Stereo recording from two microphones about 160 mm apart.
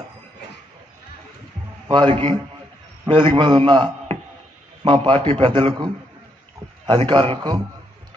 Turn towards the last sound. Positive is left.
turn(degrees=-30)  # may be behind; listen again after turning